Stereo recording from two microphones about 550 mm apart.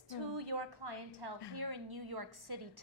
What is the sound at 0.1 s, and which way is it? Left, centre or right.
A woman's voice, right.